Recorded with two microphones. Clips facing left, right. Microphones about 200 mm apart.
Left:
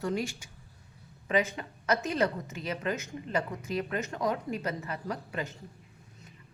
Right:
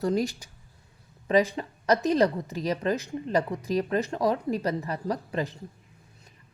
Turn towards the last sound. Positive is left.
turn(degrees=-35)  # may be behind; listen again after turning